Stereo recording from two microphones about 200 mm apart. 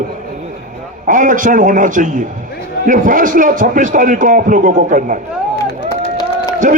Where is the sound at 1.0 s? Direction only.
40° right (ahead or behind).